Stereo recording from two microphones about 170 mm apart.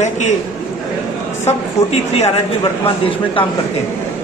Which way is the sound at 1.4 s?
40° left (ahead or behind).